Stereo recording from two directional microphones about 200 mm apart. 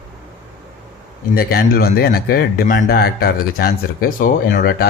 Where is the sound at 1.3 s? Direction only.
50° left (ahead or behind).